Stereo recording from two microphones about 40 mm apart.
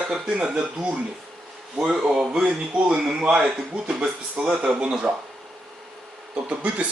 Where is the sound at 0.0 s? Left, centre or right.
Centre.